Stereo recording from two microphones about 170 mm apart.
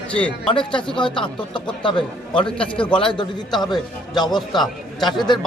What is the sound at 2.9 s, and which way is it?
A man's voice, 25° left (ahead or behind).